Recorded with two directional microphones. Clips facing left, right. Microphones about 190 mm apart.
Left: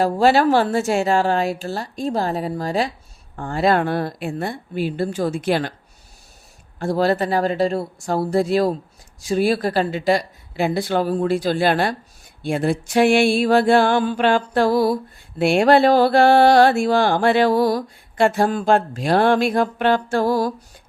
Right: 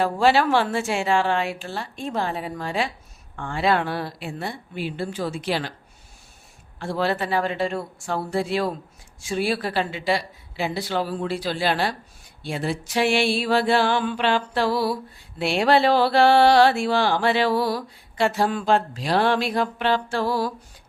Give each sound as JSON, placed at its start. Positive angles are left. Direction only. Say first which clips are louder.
{"t": 0.0, "sound": "a woman's voice", "louder": "left 4 dB", "side_deg": 40}
{"t": 3.3, "sound": "mantra", "louder": "left 4 dB", "side_deg": 40}
{"t": 6.7, "sound": "a woman's voice", "louder": "left 6 dB", "side_deg": 40}
{"t": 9.2, "sound": "mantra", "louder": "left 6 dB", "side_deg": 40}